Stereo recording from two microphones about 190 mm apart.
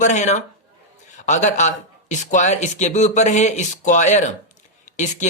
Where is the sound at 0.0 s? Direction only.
40° left (ahead or behind).